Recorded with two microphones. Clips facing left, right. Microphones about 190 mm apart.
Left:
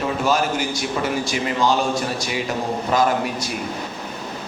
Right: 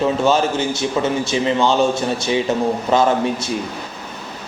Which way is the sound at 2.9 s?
25° right (ahead or behind).